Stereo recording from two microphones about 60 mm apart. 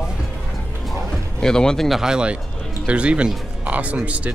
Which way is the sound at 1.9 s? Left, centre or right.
Centre.